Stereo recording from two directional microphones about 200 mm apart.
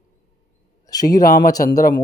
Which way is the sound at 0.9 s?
20° left (ahead or behind).